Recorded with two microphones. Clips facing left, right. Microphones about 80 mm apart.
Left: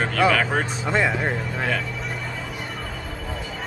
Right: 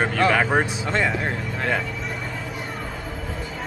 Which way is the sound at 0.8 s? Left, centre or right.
Centre.